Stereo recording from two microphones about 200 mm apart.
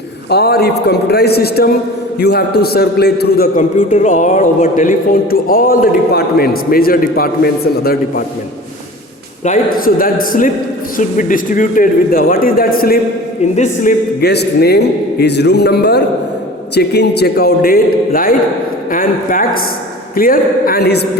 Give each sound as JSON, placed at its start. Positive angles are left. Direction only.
{"t": 0.3, "sound": "a man's voice", "side_deg": 55}
{"t": 9.4, "sound": "a man's voice", "side_deg": 40}